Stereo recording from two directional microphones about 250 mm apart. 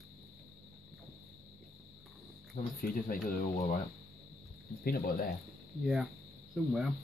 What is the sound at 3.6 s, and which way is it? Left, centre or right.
Speech, left.